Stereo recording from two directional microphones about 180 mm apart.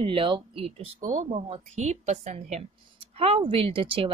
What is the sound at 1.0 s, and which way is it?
Speech, 45° right (ahead or behind).